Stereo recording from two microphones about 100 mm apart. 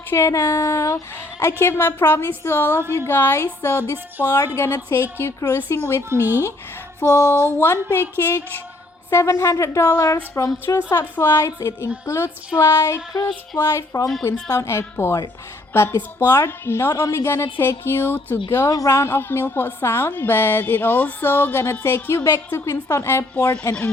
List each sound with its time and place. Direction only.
0.1 s a woman's voice: 30° left (ahead or behind)
6.1 s speech: 20° right (ahead or behind)
7.0 s a woman's voice: 30° left (ahead or behind)
18.4 s a woman's voice: 30° left (ahead or behind)
23.3 s speech: 15° left (ahead or behind)